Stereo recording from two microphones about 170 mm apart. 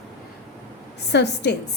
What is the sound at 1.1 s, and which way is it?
Speech, 90° left.